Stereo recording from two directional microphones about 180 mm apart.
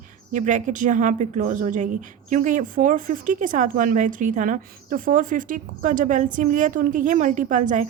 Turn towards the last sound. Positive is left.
turn(degrees=-45)  # may be behind; listen again after turning